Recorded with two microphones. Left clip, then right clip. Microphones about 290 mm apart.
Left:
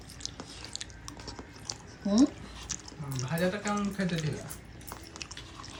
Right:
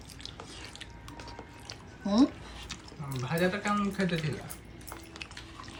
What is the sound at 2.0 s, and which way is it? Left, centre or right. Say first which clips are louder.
Drip: even; centre.